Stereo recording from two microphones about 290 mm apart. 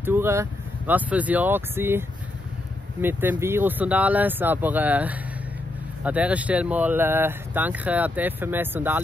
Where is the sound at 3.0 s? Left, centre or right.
Centre.